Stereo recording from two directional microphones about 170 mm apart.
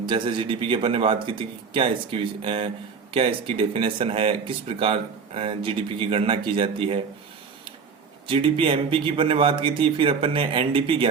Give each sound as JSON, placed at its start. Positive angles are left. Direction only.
{"t": 0.0, "sound": "speech", "side_deg": -30}
{"t": 8.3, "sound": "speech", "side_deg": -30}